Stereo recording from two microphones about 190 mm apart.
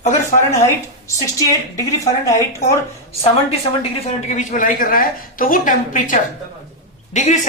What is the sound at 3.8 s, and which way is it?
A woman's voice, 35° left (ahead or behind).